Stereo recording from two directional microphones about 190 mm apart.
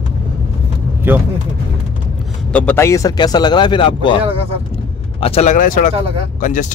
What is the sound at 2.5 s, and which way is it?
Speech, 10° left (ahead or behind).